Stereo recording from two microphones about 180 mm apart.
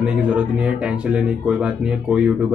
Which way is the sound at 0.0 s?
5° right (ahead or behind).